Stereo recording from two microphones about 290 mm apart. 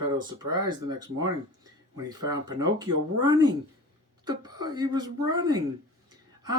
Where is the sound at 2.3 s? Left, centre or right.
Centre.